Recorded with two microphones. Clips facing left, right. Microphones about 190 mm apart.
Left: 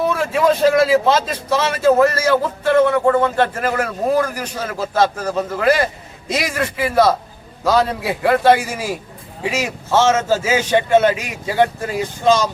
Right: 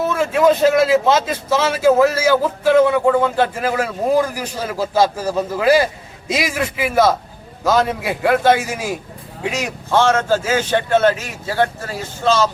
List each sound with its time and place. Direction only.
0.1 s a man's voice: centre (ahead or behind); by 12.5 s 15° left (ahead or behind)